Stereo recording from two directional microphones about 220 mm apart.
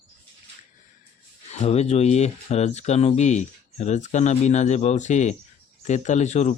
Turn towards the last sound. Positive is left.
turn(degrees=30)  # may be behind; listen again after turning